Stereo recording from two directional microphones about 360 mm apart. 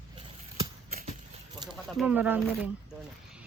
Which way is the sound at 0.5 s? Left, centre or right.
Centre.